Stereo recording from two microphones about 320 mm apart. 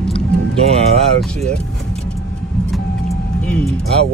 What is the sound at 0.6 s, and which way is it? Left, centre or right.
Speech, centre.